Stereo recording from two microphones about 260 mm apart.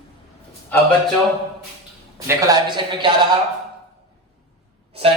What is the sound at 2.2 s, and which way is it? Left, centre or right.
Speech, centre.